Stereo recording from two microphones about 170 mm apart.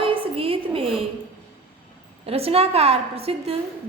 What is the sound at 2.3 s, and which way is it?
A woman's voice, 35° right (ahead or behind).